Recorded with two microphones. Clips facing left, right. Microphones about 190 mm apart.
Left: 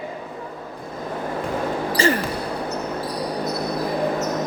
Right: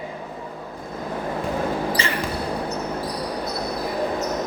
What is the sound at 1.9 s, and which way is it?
Basketball bounce, 45° left (ahead or behind).